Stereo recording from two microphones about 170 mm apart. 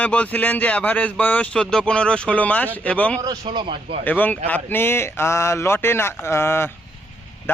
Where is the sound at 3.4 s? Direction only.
30° right (ahead or behind).